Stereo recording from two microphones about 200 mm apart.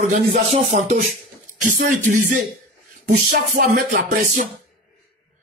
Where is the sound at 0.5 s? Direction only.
35° right (ahead or behind).